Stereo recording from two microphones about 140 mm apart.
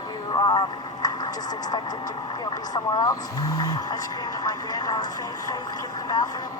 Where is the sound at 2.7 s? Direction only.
25° left (ahead or behind).